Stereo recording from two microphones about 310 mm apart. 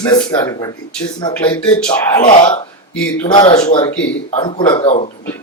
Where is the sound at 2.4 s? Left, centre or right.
Centre.